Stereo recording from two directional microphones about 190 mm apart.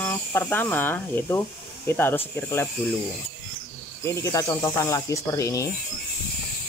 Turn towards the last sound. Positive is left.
turn(degrees=15)  # may be behind; listen again after turning